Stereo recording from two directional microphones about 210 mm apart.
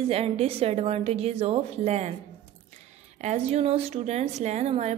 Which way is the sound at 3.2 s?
30° right (ahead or behind).